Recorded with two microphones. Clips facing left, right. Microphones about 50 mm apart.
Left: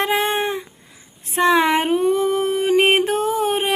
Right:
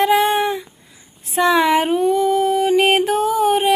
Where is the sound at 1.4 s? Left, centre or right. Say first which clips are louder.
Right 1 dB; left.